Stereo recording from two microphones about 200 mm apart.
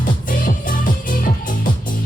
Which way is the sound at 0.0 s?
40° left (ahead or behind).